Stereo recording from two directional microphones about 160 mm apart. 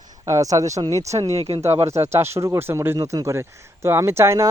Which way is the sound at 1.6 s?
15° right (ahead or behind).